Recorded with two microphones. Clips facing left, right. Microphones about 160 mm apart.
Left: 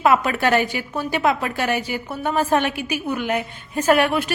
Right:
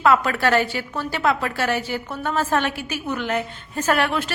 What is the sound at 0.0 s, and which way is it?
A woman's voice, 20° left (ahead or behind).